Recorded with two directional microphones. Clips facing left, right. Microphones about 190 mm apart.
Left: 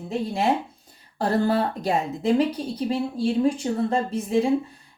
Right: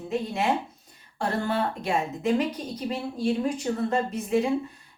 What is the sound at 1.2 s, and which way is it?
Speech, 35° left (ahead or behind).